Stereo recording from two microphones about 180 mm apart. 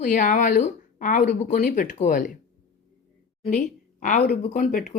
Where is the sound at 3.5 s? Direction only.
45° left (ahead or behind).